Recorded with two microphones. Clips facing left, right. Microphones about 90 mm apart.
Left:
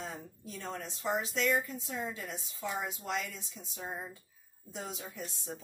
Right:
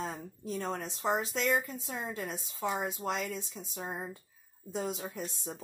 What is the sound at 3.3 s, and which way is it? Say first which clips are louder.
Speech: right 7 dB; 50° right (ahead or behind).